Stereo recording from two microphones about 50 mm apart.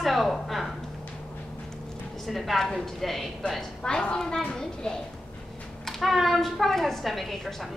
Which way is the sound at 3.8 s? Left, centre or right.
Centre.